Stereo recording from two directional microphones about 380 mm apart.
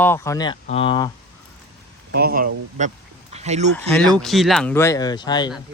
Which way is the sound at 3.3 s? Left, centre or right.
Centre.